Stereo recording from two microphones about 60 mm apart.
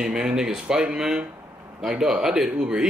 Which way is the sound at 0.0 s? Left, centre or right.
Centre.